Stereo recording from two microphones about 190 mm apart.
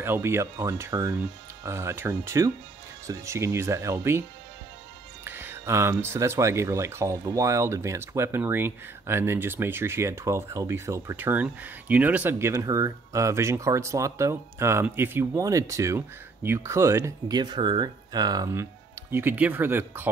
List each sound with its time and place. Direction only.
0.0 s speech: 10° right (ahead or behind)
5.2 s speech: 10° right (ahead or behind)